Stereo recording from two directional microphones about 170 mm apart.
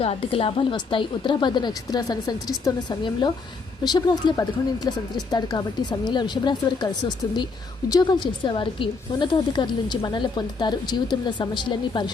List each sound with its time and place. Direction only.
0.0 s a woman's voice: 35° left (ahead or behind)